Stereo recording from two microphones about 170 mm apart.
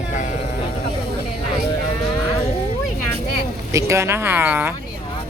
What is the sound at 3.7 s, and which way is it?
Speech, 15° right (ahead or behind).